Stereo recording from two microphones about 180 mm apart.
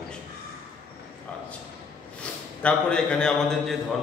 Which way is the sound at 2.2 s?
5° left (ahead or behind).